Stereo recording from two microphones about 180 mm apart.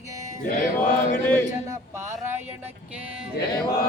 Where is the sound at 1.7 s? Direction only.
15° right (ahead or behind).